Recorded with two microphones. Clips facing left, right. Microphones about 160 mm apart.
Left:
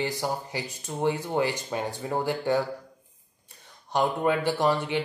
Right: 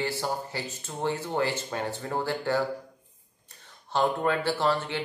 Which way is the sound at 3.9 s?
15° left (ahead or behind).